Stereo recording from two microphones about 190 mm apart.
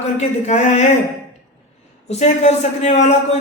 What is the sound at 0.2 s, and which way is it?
Speech, 35° left (ahead or behind).